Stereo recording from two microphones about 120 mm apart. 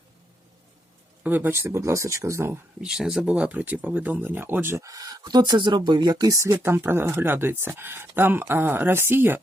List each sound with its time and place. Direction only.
1.2 s speech: 15° right (ahead or behind)
2.8 s speech: 5° right (ahead or behind)